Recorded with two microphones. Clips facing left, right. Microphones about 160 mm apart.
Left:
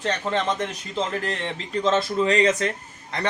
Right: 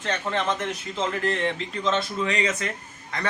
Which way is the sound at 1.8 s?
35° left (ahead or behind).